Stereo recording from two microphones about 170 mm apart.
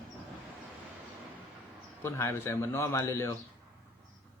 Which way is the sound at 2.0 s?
15° left (ahead or behind).